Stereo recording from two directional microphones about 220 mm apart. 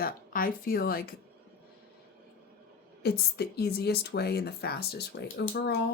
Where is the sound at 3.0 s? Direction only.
45° left (ahead or behind).